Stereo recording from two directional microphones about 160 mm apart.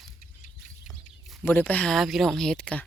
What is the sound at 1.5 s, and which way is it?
Speech, 10° left (ahead or behind).